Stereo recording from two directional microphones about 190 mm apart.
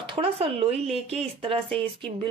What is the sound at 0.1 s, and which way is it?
A woman's voice, 30° right (ahead or behind).